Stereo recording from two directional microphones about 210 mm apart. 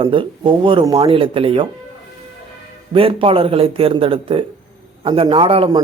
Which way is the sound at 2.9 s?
25° right (ahead or behind).